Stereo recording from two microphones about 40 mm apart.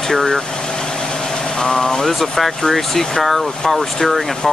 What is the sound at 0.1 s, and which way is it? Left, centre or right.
Speech, centre.